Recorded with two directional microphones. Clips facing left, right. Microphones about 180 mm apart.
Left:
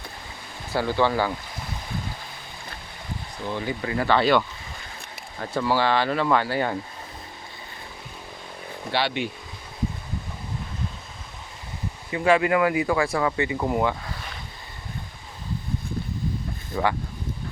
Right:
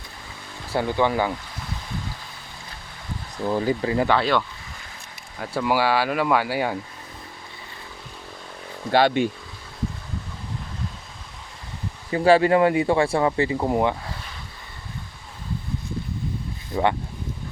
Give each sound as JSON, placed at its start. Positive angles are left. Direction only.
{"t": 0.7, "sound": "speech", "side_deg": -20}
{"t": 3.4, "sound": "speech", "side_deg": -35}
{"t": 4.1, "sound": "speech", "side_deg": 0}
{"t": 5.6, "sound": "speech", "side_deg": -10}
{"t": 8.9, "sound": "speech", "side_deg": -45}
{"t": 12.1, "sound": "speech", "side_deg": -35}
{"t": 16.7, "sound": "a sound", "side_deg": -25}